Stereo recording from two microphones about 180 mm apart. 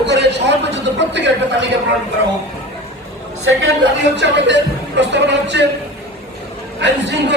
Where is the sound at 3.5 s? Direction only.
90° right.